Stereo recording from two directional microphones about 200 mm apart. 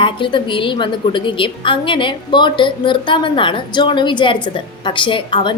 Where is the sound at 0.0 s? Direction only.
25° left (ahead or behind).